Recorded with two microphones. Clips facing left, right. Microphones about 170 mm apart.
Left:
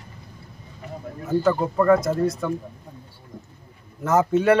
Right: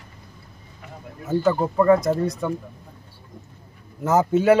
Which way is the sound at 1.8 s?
Centre (ahead or behind).